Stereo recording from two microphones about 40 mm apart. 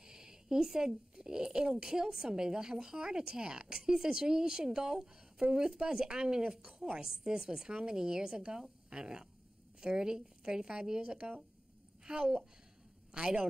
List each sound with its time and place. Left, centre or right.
0.0 s a woman's voice: centre